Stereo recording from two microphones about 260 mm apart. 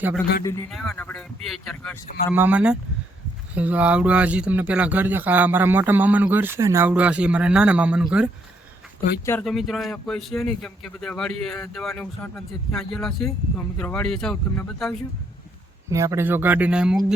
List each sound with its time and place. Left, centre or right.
0.7 s speech: centre
2.0 s speech: left
2.3 s speech: centre
15.9 s speech: centre